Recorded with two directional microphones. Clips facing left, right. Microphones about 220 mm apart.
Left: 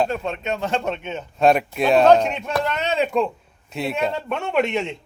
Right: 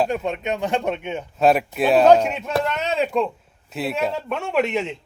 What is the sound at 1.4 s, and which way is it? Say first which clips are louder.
A man's voice: even; 5° right (ahead or behind).